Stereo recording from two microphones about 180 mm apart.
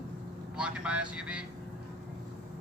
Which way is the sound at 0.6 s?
5° right (ahead or behind).